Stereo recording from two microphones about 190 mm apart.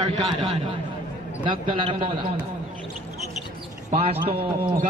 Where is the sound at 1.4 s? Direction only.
25° right (ahead or behind).